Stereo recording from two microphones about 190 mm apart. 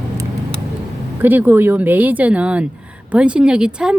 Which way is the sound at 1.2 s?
10° right (ahead or behind).